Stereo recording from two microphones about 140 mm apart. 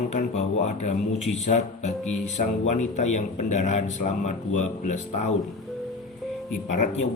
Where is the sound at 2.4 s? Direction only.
70° left (ahead or behind).